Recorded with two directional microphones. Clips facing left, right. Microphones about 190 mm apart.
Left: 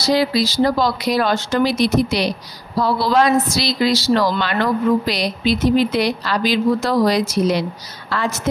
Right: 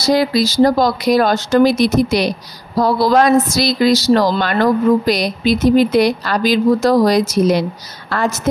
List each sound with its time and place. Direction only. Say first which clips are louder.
0.0 s speech: right 3 dB; 45° right (ahead or behind)